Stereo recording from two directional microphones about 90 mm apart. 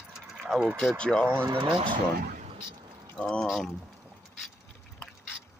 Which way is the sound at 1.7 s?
65° right (ahead or behind).